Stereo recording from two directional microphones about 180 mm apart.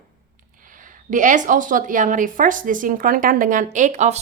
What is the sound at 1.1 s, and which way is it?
A woman's voice, 45° right (ahead or behind).